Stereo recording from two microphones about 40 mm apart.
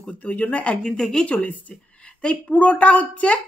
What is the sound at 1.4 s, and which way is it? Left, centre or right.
Speech, left.